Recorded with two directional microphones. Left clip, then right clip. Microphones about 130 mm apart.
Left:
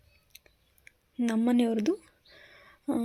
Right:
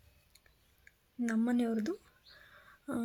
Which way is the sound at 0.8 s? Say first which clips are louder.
Left 6 dB; 30° left (ahead or behind).